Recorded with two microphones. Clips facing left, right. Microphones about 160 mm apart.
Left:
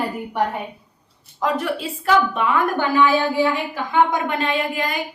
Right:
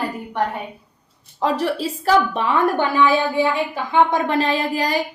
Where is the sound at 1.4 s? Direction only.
35° right (ahead or behind).